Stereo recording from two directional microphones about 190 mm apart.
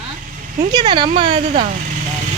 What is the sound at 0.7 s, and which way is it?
Speech, 20° right (ahead or behind).